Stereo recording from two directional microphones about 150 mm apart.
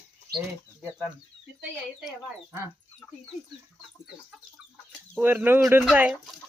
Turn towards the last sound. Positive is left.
turn(degrees=-10)  # may be behind; listen again after turning